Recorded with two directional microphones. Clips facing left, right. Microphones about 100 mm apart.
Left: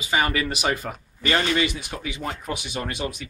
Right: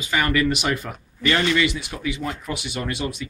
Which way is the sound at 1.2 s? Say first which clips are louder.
Right 2 dB; 40° left (ahead or behind).